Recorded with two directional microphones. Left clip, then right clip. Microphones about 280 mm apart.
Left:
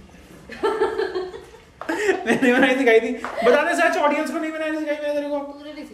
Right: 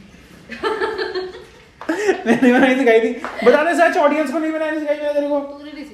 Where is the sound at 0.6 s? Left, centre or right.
Left.